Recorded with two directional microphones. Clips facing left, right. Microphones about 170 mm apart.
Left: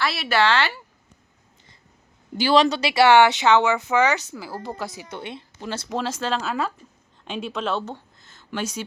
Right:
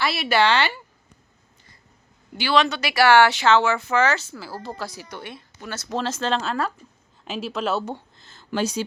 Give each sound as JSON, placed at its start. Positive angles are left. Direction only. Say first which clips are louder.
{"t": 0.0, "sound": "speech", "louder": "right 1 dB", "side_deg": 0}
{"t": 2.4, "sound": "speech", "louder": "left 3 dB", "side_deg": 40}
{"t": 5.9, "sound": "speech", "louder": "right 2 dB", "side_deg": 10}
{"t": 8.2, "sound": "a sound", "louder": "right 5 dB", "side_deg": -30}